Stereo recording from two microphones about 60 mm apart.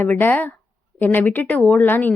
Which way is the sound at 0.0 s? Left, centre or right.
Left.